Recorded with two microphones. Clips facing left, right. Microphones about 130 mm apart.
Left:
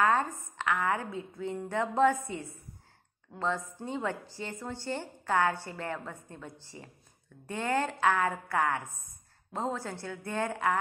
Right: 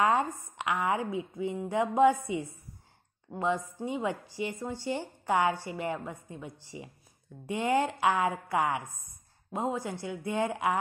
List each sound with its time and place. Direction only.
0.0 s a woman's voice: 15° right (ahead or behind)